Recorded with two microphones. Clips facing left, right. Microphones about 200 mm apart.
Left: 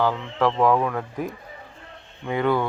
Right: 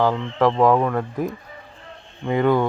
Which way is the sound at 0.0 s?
15° right (ahead or behind).